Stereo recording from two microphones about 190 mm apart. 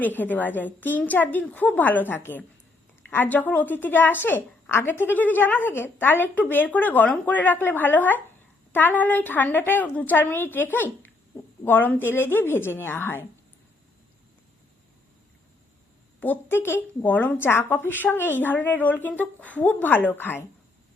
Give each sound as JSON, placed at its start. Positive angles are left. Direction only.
{"t": 0.0, "sound": "a woman's voice", "side_deg": 10}
{"t": 16.2, "sound": "a woman's voice", "side_deg": 10}